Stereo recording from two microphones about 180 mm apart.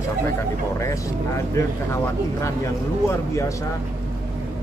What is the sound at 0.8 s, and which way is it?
Speech, 15° left (ahead or behind).